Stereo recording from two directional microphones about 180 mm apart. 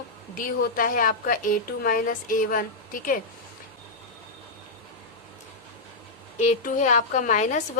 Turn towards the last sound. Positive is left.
turn(degrees=40)  # may be behind; listen again after turning